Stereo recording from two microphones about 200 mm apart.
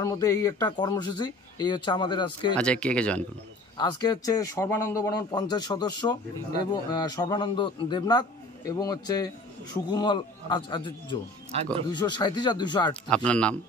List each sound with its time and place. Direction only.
0.0 s a man's voice: 15° left (ahead or behind)
2.5 s speech: 5° left (ahead or behind)
3.7 s a man's voice: 20° left (ahead or behind)
13.1 s speech: 5° left (ahead or behind)